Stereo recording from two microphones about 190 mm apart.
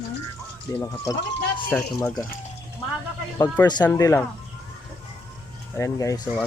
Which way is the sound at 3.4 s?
20° left (ahead or behind).